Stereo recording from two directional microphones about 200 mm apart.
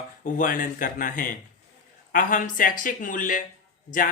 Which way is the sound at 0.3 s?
40° left (ahead or behind).